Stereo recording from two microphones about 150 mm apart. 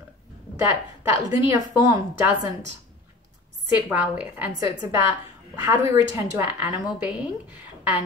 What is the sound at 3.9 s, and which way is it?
Speech, 10° right (ahead or behind).